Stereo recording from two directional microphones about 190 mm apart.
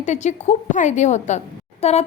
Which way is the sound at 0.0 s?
40° left (ahead or behind).